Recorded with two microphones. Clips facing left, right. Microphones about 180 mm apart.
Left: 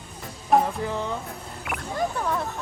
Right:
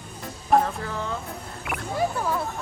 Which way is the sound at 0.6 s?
20° left (ahead or behind).